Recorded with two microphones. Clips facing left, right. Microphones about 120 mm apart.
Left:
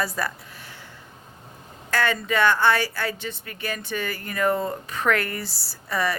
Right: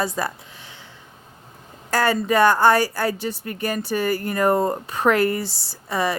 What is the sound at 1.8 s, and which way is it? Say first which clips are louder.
A woman's voice: right 4 dB; 40° right (ahead or behind).